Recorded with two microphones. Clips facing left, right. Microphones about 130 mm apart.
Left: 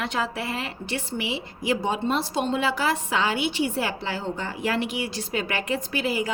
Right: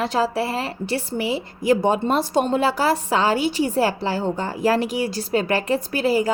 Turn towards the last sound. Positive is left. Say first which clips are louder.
# right 6 dB
turn(degrees=-40)  # may be behind; listen again after turning